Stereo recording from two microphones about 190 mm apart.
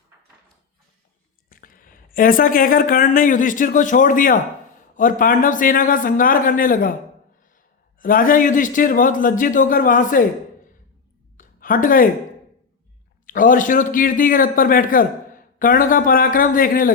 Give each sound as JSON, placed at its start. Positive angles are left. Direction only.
{"t": 1.5, "sound": "speech", "side_deg": 50}
{"t": 7.9, "sound": "speech", "side_deg": 45}
{"t": 11.3, "sound": "a sound", "side_deg": 45}
{"t": 13.2, "sound": "speech", "side_deg": 45}